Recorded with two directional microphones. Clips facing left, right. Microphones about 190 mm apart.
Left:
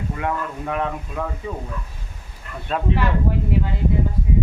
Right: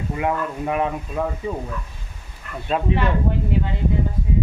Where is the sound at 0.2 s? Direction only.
10° right (ahead or behind).